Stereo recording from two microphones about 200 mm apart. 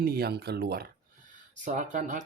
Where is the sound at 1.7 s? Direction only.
40° right (ahead or behind).